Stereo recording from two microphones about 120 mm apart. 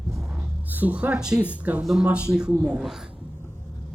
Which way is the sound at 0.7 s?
15° right (ahead or behind).